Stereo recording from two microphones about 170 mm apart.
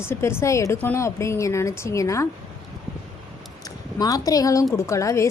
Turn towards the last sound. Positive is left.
turn(degrees=15)  # may be behind; listen again after turning